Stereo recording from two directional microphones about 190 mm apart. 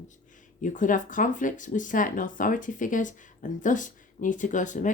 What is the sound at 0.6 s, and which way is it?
Speech, 45° left (ahead or behind).